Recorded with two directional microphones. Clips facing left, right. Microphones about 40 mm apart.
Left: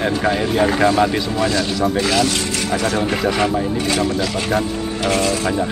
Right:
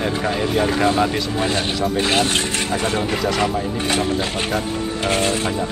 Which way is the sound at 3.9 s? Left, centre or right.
Right.